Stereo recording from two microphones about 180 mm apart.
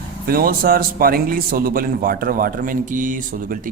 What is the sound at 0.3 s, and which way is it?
A man's voice, 55° right (ahead or behind).